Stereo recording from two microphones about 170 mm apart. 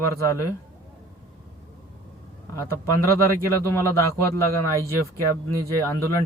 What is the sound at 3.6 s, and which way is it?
Speech, 15° left (ahead or behind).